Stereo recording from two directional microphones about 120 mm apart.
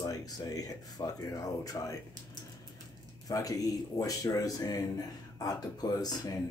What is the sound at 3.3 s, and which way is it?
Speech, 30° left (ahead or behind).